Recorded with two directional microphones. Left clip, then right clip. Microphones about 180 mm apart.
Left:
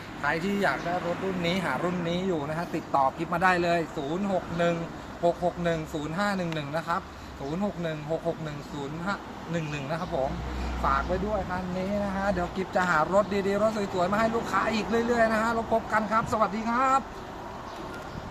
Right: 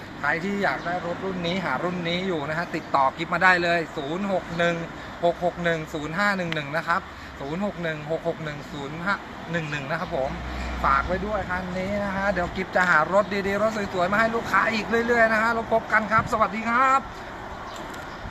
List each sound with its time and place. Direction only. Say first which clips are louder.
0.2 s speech: right 2 dB; 5° left (ahead or behind)
9.0 s speech: right 8 dB; centre (ahead or behind)